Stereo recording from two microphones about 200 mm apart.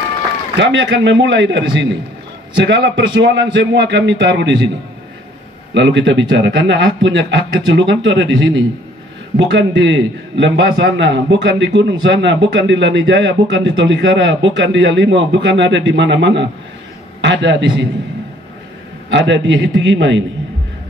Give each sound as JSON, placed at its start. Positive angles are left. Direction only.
{"t": 0.6, "sound": "a man's voice", "side_deg": -60}
{"t": 5.8, "sound": "a man's voice", "side_deg": -65}
{"t": 19.0, "sound": "a man's voice", "side_deg": -65}